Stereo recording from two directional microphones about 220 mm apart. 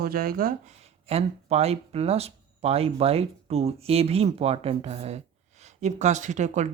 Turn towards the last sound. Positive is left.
turn(degrees=-35)  # may be behind; listen again after turning